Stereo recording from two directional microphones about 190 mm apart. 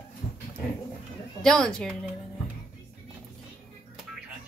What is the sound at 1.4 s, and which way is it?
Speech, 5° left (ahead or behind).